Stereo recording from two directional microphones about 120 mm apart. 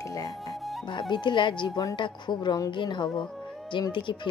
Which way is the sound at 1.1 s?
40° left (ahead or behind).